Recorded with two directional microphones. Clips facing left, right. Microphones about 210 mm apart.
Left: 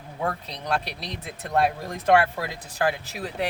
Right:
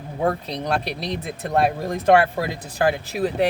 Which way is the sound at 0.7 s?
20° right (ahead or behind).